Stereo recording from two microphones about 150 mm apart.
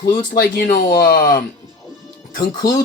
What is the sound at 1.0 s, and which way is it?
Speech, 70° left (ahead or behind).